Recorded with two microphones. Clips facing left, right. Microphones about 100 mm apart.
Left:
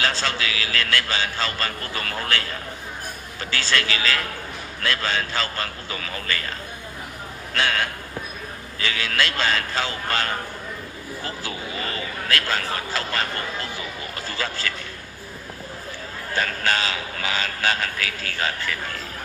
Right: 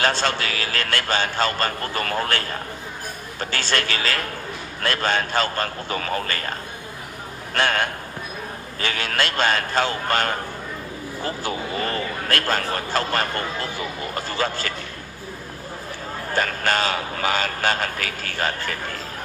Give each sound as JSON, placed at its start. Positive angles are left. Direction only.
{"t": 0.0, "sound": "a man's voice", "side_deg": -50}
{"t": 7.5, "sound": "a man's voice", "side_deg": -50}
{"t": 11.9, "sound": "speech", "side_deg": -50}
{"t": 14.3, "sound": "a man's voice", "side_deg": -45}
{"t": 16.4, "sound": "a man's voice", "side_deg": -45}